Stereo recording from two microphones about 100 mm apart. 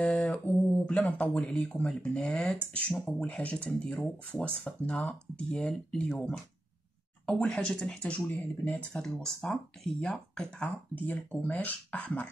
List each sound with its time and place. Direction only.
0.0 s mantra: 15° left (ahead or behind)
0.8 s speech: 10° left (ahead or behind)